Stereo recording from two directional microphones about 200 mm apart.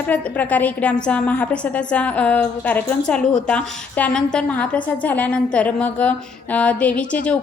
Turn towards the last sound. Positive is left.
turn(degrees=5)  # may be behind; listen again after turning